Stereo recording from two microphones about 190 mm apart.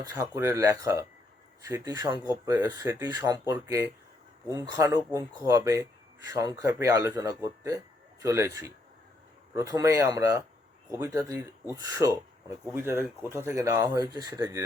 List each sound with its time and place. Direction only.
0.0 s speech: 10° right (ahead or behind)